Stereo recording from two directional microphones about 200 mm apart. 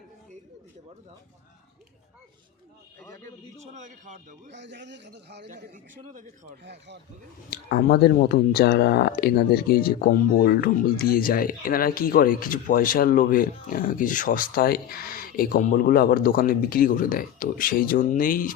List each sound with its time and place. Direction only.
3.0 s a man's voice: 15° left (ahead or behind)
3.8 s a man's voice: 40° right (ahead or behind)
4.5 s a man's voice: 60° right (ahead or behind)
5.7 s a man's voice: 40° right (ahead or behind)
6.7 s a man's voice: 60° right (ahead or behind)
7.5 s speech: 50° left (ahead or behind)